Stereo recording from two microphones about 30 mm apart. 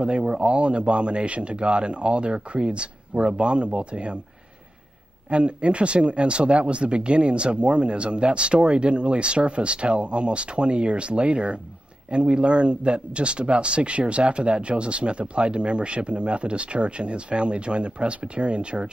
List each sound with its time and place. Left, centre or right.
0.4 s a man's voice: right
5.3 s a man's voice: right